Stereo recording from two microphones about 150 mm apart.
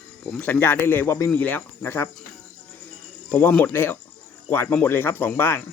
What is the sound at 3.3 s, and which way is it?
Speech, 15° left (ahead or behind).